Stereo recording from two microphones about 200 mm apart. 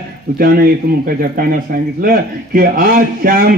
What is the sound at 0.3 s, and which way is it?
A man's voice, 50° right (ahead or behind).